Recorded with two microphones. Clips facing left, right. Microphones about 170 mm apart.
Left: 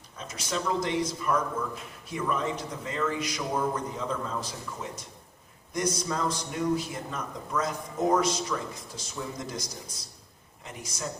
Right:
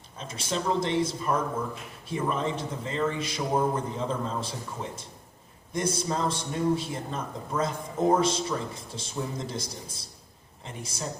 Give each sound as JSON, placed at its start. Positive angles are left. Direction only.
{"t": 0.2, "sound": "a man's voice", "side_deg": -30}